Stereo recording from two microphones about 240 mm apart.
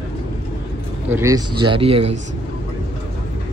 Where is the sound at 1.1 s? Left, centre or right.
Centre.